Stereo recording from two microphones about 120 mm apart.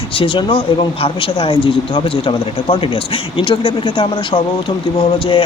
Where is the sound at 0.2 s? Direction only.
45° left (ahead or behind).